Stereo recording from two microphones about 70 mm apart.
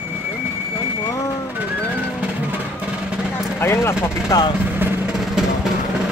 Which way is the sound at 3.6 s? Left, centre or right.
Left.